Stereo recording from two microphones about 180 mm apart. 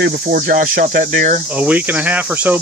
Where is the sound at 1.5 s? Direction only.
10° right (ahead or behind).